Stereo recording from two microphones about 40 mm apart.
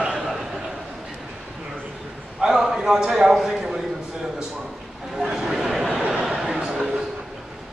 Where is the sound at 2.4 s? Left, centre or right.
Centre.